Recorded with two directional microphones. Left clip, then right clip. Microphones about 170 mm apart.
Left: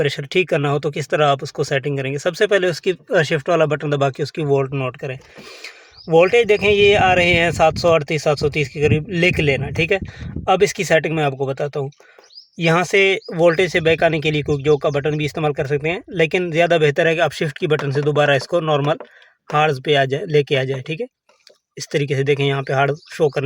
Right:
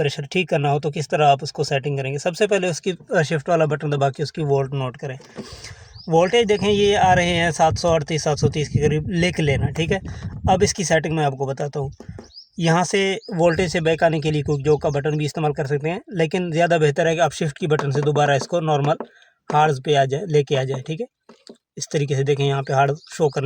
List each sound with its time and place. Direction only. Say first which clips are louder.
0.0 s speech: left 4 dB; 25° left (ahead or behind)